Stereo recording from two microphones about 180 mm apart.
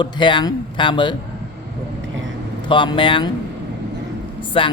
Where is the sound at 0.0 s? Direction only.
25° left (ahead or behind).